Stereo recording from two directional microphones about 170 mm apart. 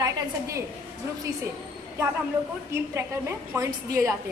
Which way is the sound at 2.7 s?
15° right (ahead or behind).